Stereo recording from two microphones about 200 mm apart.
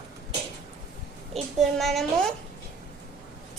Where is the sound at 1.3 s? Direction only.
Centre (ahead or behind).